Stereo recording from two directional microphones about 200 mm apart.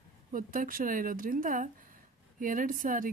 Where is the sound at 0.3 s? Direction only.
45° right (ahead or behind).